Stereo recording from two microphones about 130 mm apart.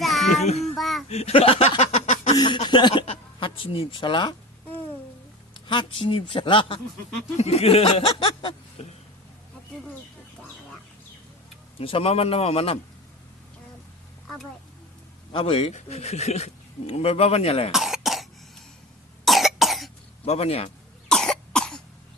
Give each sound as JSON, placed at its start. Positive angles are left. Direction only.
{"t": 0.0, "sound": "child singing", "side_deg": 0}
{"t": 0.3, "sound": "child singing", "side_deg": 55}
{"t": 0.8, "sound": "a sound", "side_deg": 0}
{"t": 1.0, "sound": "a sound", "side_deg": 55}
{"t": 2.3, "sound": "a sound", "side_deg": 35}
{"t": 5.5, "sound": "speech", "side_deg": 40}
{"t": 7.3, "sound": "speech", "side_deg": 55}
{"t": 11.8, "sound": "speech", "side_deg": 45}
{"t": 15.3, "sound": "speech", "side_deg": 45}
{"t": 15.7, "sound": "speech", "side_deg": 55}
{"t": 17.7, "sound": "cough", "side_deg": 0}
{"t": 20.2, "sound": "speech", "side_deg": 55}
{"t": 21.1, "sound": "cough", "side_deg": 5}